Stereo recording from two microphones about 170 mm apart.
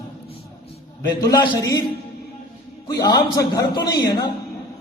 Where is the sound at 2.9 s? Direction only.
20° left (ahead or behind).